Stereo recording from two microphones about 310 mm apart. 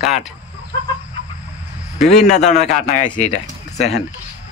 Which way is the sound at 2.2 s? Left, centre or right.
Left.